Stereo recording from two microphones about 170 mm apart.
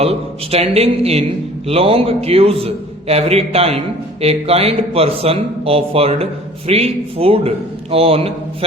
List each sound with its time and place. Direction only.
0.0 s a man's voice: 35° right (ahead or behind)